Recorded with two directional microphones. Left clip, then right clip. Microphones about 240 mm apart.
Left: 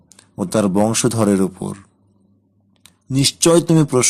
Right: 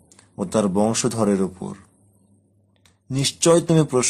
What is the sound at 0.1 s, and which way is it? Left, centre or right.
Speech, centre.